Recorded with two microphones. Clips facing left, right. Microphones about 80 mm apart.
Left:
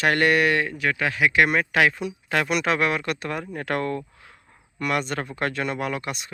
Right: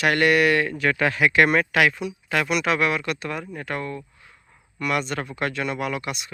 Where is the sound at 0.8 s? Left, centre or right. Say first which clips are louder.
Right 2 dB; centre.